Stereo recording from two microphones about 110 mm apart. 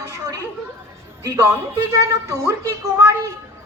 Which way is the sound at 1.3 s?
30° right (ahead or behind).